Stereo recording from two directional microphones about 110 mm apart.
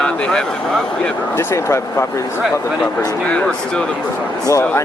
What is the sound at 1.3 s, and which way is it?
Speech, 25° left (ahead or behind).